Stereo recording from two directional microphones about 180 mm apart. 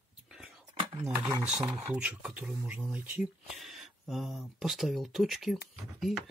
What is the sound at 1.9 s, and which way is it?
Speech, 5° right (ahead or behind).